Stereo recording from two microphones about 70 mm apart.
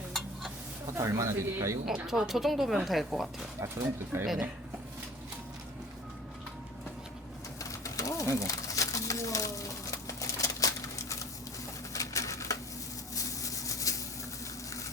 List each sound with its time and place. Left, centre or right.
0.9 s speech: right
2.0 s speech: centre
3.6 s speech: right
7.6 s pigeon: left
8.4 s a sound: left